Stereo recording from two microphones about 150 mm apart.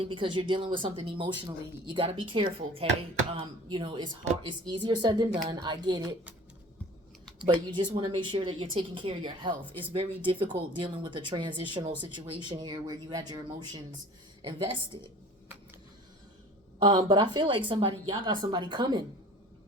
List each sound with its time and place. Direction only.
0.0 s speech: 35° right (ahead or behind)
7.3 s speech: 30° right (ahead or behind)
16.8 s speech: 30° right (ahead or behind)